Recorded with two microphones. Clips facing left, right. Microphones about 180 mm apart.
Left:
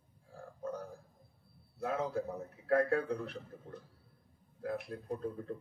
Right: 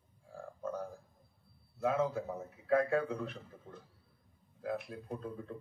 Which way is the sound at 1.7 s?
65° left (ahead or behind).